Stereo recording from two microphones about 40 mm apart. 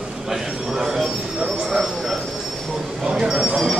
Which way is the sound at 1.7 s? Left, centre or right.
Centre.